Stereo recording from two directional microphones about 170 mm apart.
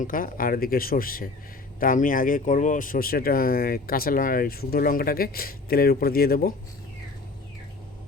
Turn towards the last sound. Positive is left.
turn(degrees=60)  # may be behind; listen again after turning